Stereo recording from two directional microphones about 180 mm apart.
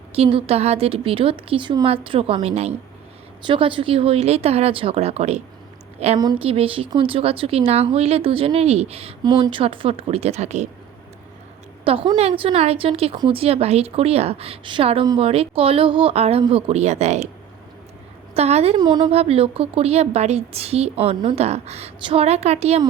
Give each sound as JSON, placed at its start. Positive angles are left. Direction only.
{"t": 0.2, "sound": "a woman's voice", "side_deg": -30}
{"t": 11.9, "sound": "a woman's voice", "side_deg": -30}
{"t": 18.3, "sound": "a woman's voice", "side_deg": -35}
{"t": 18.8, "sound": "a woman's voice", "side_deg": -25}